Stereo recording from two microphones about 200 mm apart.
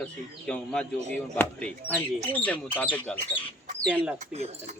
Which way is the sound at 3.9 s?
5° right (ahead or behind).